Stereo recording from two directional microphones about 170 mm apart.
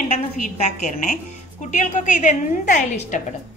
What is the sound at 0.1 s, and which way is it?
A woman's voice, 45° left (ahead or behind).